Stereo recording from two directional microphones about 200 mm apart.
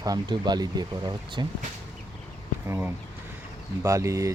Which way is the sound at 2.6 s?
10° right (ahead or behind).